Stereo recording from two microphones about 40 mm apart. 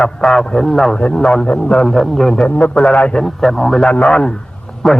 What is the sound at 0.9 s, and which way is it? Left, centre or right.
A man's voice, left.